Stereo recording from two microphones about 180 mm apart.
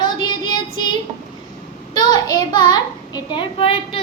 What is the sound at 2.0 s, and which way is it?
A child's voice, 20° left (ahead or behind).